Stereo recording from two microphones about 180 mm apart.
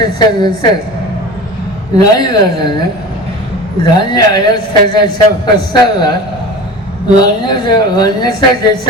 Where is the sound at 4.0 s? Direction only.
25° left (ahead or behind).